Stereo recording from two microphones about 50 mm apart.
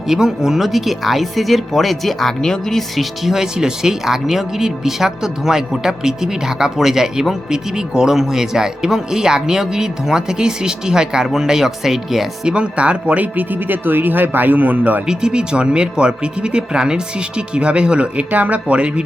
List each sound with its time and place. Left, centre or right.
0.1 s speech: centre
12.5 s speech: right
15.0 s speech: centre
18.3 s speech: right